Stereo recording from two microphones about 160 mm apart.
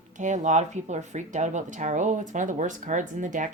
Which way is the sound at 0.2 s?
50° right (ahead or behind).